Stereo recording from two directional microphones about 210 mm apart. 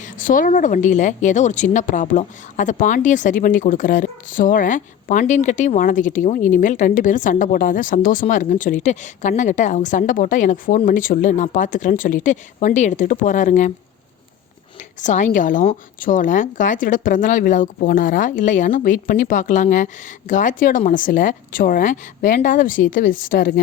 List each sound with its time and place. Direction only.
0.0 s a woman's voice: 40° left (ahead or behind)
15.0 s a woman's voice: 35° left (ahead or behind)